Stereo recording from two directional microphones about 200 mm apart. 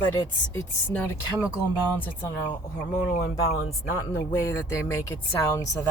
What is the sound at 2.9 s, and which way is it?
Speech, 35° left (ahead or behind).